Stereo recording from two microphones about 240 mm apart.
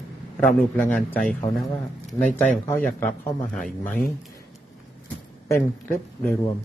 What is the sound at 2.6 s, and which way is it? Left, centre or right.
Speech, centre.